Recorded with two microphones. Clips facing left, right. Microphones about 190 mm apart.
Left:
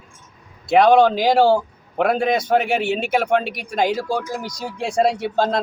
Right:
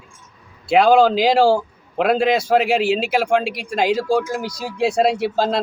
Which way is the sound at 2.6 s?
85° right.